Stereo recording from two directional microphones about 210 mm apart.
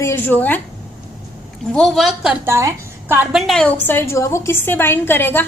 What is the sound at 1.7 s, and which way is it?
A woman's voice, centre (ahead or behind).